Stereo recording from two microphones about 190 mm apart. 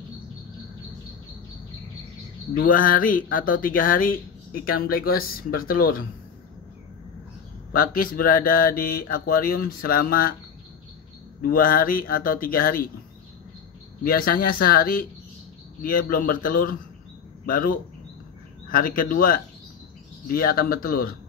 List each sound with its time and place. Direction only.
2.6 s speech: 50° left (ahead or behind)
7.7 s speech: 50° left (ahead or behind)
11.4 s speech: 50° left (ahead or behind)
14.0 s speech: 50° left (ahead or behind)